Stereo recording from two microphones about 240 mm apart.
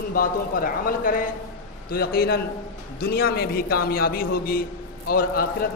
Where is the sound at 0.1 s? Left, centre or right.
Left.